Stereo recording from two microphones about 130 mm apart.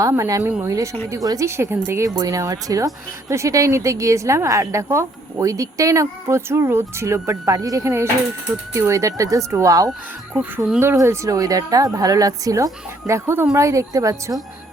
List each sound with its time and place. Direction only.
0.0 s speech: 25° right (ahead or behind)